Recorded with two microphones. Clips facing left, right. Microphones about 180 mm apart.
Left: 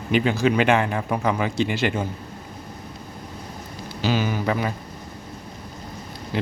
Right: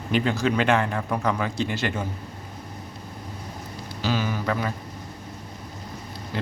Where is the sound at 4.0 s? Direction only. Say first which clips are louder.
Left 3 dB; 20° left (ahead or behind).